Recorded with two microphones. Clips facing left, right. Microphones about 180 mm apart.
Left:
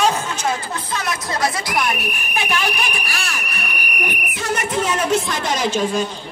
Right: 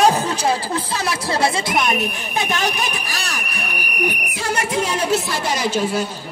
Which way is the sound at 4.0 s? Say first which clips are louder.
Right 4 dB; 35° right (ahead or behind).